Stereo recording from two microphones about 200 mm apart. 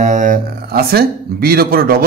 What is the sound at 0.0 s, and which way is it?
Speech, 40° right (ahead or behind).